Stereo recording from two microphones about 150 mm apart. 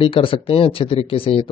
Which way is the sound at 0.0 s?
35° left (ahead or behind).